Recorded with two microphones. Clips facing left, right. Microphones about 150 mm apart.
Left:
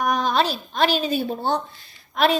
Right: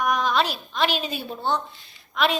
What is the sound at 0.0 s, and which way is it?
A woman's voice, 35° left (ahead or behind).